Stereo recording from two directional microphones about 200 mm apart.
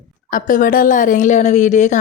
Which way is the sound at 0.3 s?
40° left (ahead or behind).